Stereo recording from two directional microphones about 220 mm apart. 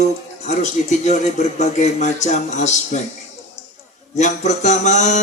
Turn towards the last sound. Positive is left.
turn(degrees=35)  # may be behind; listen again after turning